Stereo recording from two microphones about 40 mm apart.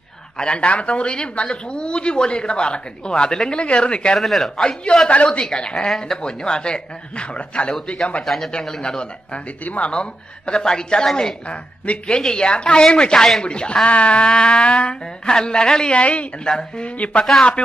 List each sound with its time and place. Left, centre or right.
0.4 s speech: left
4.1 s speech: centre
5.1 s speech: left
5.9 s speech: centre
6.2 s speech: left
8.2 s speech: centre
8.8 s speech: left
11.4 s speech: left
12.2 s speech: left
15.9 s speech: left